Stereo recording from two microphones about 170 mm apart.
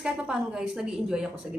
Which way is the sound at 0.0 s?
5° right (ahead or behind).